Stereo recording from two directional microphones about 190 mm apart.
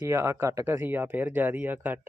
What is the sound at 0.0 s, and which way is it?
Speech, 15° right (ahead or behind).